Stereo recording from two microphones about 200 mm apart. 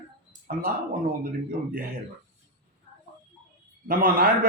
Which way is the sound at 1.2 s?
45° right (ahead or behind).